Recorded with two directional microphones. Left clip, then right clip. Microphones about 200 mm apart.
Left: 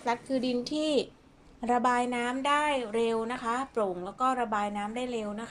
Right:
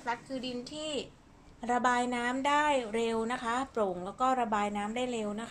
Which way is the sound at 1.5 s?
10° left (ahead or behind).